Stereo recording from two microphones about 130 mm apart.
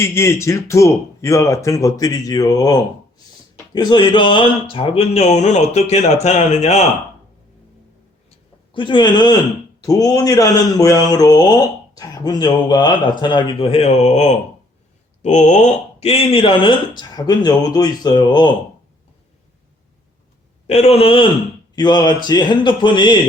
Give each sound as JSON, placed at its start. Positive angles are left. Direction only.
{"t": 0.0, "sound": "speech", "side_deg": 20}
{"t": 8.3, "sound": "a sound", "side_deg": 40}
{"t": 9.8, "sound": "speech", "side_deg": 30}
{"t": 20.7, "sound": "speech", "side_deg": 55}
{"t": 21.8, "sound": "speech", "side_deg": 35}